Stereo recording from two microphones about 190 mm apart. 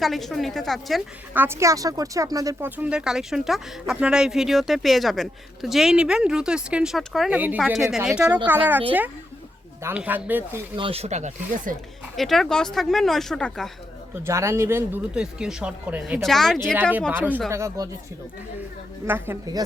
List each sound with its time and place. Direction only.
0.0 s speech: centre (ahead or behind)
1.3 s speech: 10° right (ahead or behind)
9.8 s speech: 10° right (ahead or behind)
10.8 s speech: 30° right (ahead or behind)
12.1 s speech: centre (ahead or behind)
14.3 s speech: 15° right (ahead or behind); by 16.6 s centre (ahead or behind)
17.1 s speech: 10° right (ahead or behind)
19.0 s speech: 10° right (ahead or behind)